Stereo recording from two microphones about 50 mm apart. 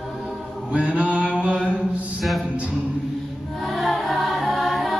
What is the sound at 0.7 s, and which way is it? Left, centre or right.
Mantra, right.